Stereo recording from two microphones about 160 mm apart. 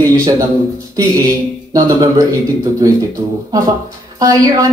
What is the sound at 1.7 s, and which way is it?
Speech, 20° right (ahead or behind).